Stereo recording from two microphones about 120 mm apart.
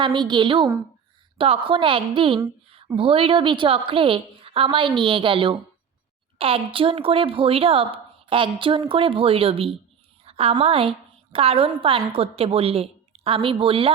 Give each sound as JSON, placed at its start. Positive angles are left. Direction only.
{"t": 0.0, "sound": "a woman's voice", "side_deg": -40}
{"t": 10.2, "sound": "a sound", "side_deg": -55}
{"t": 10.5, "sound": "a woman's voice", "side_deg": -50}